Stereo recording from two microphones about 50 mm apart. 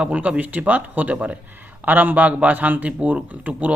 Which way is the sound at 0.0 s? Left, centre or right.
Right.